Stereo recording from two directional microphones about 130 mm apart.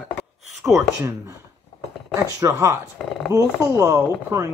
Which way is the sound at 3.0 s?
10° left (ahead or behind).